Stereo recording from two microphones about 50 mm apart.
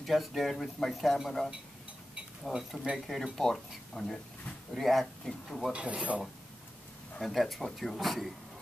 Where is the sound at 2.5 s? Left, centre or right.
Centre.